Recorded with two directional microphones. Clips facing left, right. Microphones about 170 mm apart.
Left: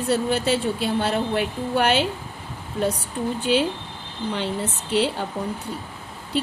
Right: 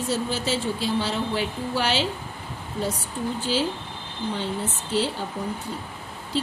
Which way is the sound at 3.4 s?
60° left (ahead or behind).